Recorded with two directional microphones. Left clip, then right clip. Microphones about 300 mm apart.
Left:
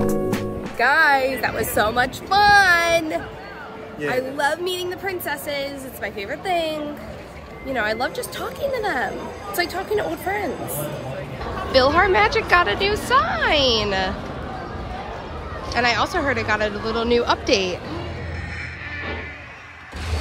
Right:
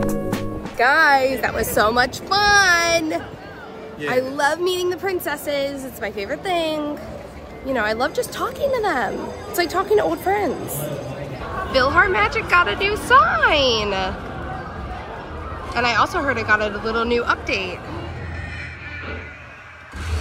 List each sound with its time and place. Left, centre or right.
0.0 s a woman's voice: centre
11.7 s speech: centre
15.7 s speech: centre